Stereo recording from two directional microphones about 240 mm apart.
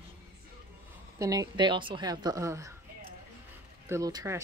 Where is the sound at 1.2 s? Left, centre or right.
Centre.